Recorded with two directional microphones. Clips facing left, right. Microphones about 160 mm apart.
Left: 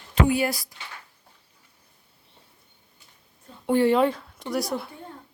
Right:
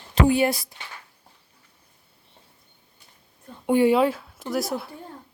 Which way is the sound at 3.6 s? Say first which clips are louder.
Right 1 dB; 15° right (ahead or behind).